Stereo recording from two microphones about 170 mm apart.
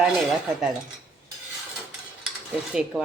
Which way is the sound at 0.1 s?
Centre (ahead or behind).